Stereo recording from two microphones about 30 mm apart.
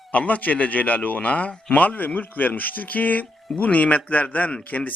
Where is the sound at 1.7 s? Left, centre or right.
Left.